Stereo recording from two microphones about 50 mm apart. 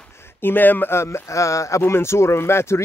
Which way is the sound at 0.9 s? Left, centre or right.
Left.